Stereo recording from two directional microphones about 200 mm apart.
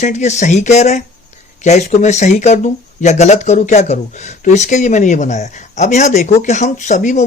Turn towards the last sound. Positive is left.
turn(degrees=35)  # may be behind; listen again after turning